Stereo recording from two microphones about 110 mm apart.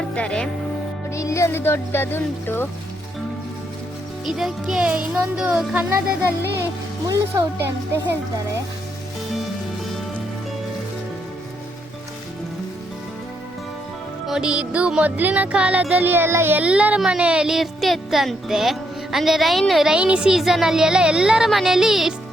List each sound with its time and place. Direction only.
0.2 s speech: 5° left (ahead or behind)
1.1 s speech: 25° left (ahead or behind)
4.3 s a child's voice: 5° right (ahead or behind)
5.5 s music: 5° right (ahead or behind)
7.1 s speech: 25° right (ahead or behind)
14.3 s music: 10° right (ahead or behind)